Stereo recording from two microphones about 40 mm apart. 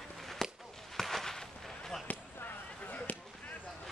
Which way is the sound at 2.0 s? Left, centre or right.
Left.